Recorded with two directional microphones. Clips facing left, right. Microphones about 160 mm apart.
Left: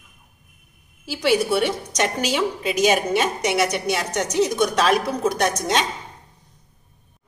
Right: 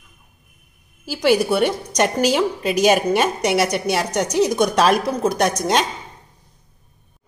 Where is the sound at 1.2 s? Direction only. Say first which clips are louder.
Right 3 dB; 50° right (ahead or behind).